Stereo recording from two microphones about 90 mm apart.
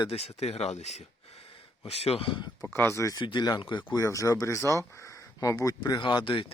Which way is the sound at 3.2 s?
65° left (ahead or behind).